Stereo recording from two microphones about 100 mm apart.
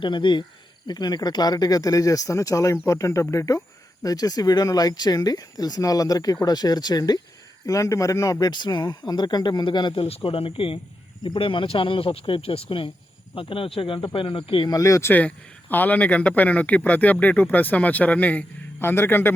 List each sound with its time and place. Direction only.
0.0 s speech: 55° left (ahead or behind)
14.7 s speech: 35° left (ahead or behind)
15.7 s speech: 15° left (ahead or behind)